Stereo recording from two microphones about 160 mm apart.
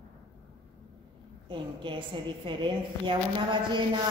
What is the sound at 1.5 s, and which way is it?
A woman's voice, 30° right (ahead or behind).